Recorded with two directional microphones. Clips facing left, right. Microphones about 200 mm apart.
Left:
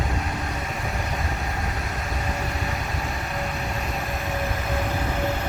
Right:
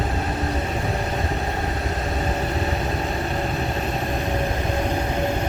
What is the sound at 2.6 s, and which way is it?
Vehicle, 35° right (ahead or behind).